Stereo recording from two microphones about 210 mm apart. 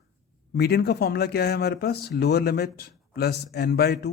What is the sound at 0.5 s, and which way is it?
A man's voice, 50° left (ahead or behind).